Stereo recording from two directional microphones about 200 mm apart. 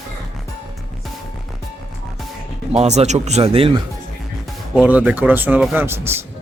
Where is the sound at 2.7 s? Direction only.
35° right (ahead or behind).